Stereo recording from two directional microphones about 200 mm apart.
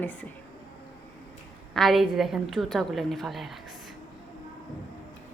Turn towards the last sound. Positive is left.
turn(degrees=0)  # may be behind; listen again after turning